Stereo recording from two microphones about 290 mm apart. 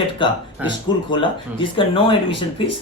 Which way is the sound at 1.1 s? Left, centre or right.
Centre.